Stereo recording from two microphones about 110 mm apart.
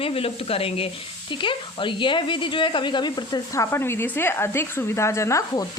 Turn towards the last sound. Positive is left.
turn(degrees=30)  # may be behind; listen again after turning